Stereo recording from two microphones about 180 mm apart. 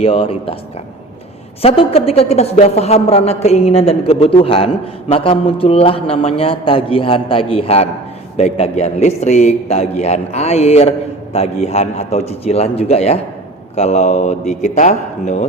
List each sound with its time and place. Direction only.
0.0 s speech: 30° left (ahead or behind)
1.6 s speech: 30° left (ahead or behind)